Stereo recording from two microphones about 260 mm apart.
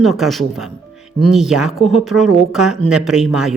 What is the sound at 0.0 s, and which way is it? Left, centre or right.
Speech, centre.